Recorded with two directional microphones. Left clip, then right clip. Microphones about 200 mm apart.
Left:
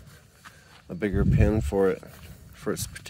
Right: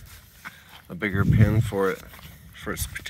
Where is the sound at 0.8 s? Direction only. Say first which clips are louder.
Right 1 dB; 30° left (ahead or behind).